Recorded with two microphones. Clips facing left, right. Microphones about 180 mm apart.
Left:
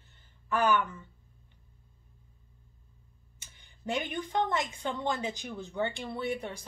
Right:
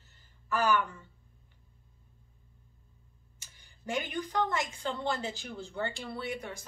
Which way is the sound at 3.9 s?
25° left (ahead or behind).